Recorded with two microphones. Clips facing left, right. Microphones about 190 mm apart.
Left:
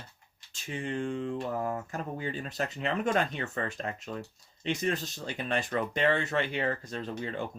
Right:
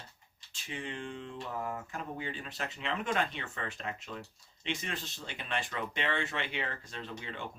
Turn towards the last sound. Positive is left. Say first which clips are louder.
# left 7 dB
turn(degrees=40)  # may be behind; listen again after turning